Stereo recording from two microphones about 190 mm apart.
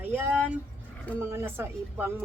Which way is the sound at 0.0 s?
10° right (ahead or behind).